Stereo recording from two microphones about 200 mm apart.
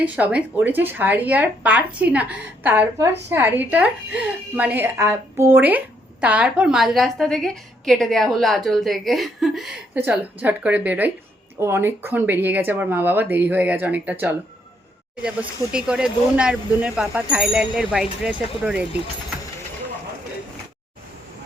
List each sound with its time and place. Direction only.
0.0 s a woman's voice: 5° right (ahead or behind)